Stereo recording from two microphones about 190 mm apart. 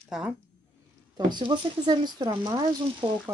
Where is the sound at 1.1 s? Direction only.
25° right (ahead or behind).